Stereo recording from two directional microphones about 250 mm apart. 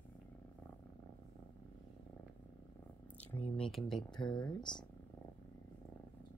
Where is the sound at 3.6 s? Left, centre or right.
Centre.